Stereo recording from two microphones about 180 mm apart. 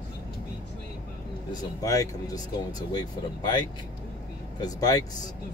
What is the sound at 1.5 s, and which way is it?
Speech, 20° left (ahead or behind).